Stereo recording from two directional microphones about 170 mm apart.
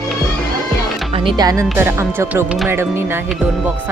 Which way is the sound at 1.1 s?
30° right (ahead or behind).